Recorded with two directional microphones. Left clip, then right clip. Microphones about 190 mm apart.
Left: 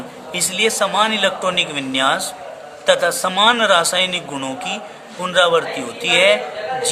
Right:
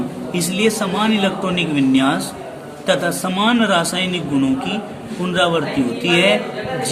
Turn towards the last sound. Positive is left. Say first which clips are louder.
# left 1 dB
turn(degrees=35)  # may be behind; listen again after turning